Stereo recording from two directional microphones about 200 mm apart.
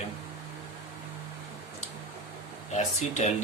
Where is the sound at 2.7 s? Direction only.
35° left (ahead or behind).